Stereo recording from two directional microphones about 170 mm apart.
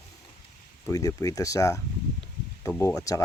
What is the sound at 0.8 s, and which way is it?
Speech, 20° left (ahead or behind).